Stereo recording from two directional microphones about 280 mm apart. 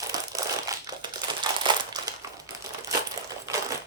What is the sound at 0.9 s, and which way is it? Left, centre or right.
Crumpling, centre.